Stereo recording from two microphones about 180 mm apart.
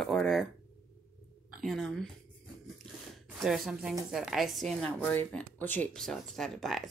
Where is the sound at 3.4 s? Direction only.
Centre (ahead or behind).